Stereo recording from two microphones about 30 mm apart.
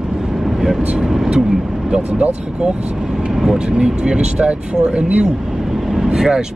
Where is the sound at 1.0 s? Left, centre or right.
Centre.